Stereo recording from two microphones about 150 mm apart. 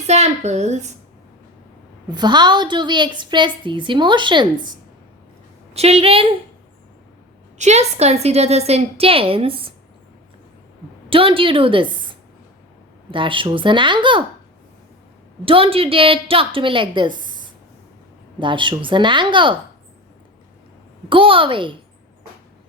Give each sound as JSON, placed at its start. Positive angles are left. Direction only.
{"t": 0.1, "sound": "a woman's voice", "side_deg": -50}
{"t": 2.0, "sound": "a woman's voice", "side_deg": -30}
{"t": 5.7, "sound": "a woman's voice", "side_deg": -45}
{"t": 7.6, "sound": "a woman's voice", "side_deg": -45}
{"t": 11.1, "sound": "a woman's voice", "side_deg": -35}
{"t": 15.4, "sound": "a woman's voice", "side_deg": -35}
{"t": 18.3, "sound": "a woman's voice", "side_deg": -35}
{"t": 21.1, "sound": "a woman's voice", "side_deg": -35}